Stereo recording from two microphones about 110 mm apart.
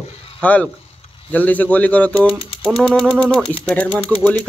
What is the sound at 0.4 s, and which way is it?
Speech, 15° left (ahead or behind).